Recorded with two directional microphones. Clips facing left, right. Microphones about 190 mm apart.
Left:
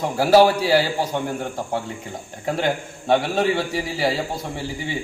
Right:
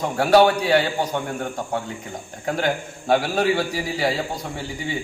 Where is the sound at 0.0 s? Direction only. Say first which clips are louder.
Left 1 dB; 5° left (ahead or behind).